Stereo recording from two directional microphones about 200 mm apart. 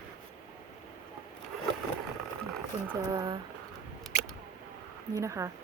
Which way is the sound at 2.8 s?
20° right (ahead or behind).